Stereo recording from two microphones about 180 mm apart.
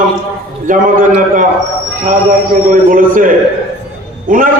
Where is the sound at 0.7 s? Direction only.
50° right (ahead or behind).